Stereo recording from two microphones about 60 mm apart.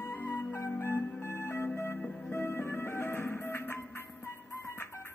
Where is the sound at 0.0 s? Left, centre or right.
Left.